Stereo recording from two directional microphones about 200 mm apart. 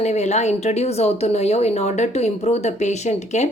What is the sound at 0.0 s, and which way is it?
A woman's voice, 35° left (ahead or behind).